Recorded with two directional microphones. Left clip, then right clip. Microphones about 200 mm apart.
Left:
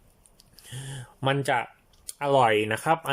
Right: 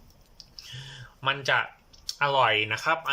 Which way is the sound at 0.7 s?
30° left (ahead or behind).